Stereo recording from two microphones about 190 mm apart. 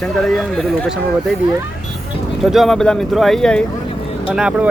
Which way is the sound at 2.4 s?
Centre (ahead or behind).